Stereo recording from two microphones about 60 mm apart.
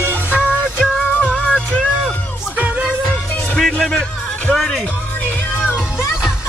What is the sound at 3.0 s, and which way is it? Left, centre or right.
Music, left.